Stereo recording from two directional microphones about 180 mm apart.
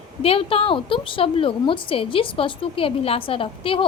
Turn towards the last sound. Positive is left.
turn(degrees=30)  # may be behind; listen again after turning